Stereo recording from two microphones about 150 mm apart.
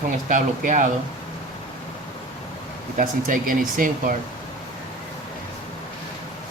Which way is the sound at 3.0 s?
65° right (ahead or behind).